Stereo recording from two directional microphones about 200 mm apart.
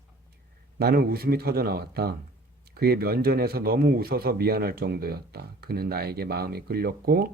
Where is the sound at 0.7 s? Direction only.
50° right (ahead or behind).